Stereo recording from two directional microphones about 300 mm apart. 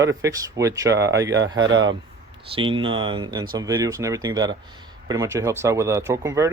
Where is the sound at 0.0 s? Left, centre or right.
Centre.